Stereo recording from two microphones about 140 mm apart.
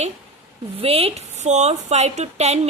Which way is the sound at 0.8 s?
45° right (ahead or behind).